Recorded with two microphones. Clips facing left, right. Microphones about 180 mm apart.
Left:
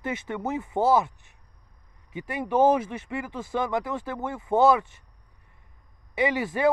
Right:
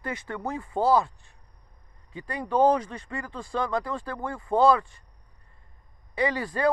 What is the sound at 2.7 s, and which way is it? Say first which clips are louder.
Speech: left 1 dB; 5° left (ahead or behind).